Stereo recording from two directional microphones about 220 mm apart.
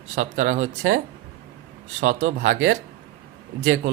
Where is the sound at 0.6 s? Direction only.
65° right (ahead or behind).